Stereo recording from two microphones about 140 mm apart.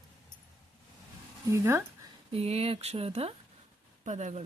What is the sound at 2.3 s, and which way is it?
Speech, 45° right (ahead or behind).